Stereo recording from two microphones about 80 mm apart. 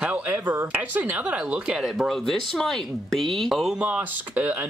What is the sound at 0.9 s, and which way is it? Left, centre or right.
Speech, centre.